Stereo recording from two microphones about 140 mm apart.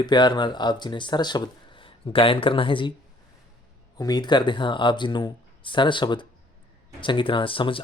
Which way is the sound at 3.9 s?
30° left (ahead or behind).